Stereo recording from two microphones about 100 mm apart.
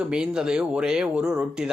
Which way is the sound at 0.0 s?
10° right (ahead or behind).